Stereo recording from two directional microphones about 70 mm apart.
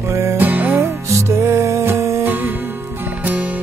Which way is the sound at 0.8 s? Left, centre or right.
Right.